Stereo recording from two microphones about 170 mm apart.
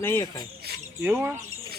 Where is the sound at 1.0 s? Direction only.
15° right (ahead or behind).